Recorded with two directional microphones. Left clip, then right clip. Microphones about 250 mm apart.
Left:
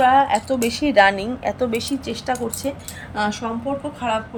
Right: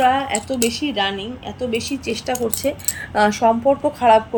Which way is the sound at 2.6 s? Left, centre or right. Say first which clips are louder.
Right 5 dB; centre.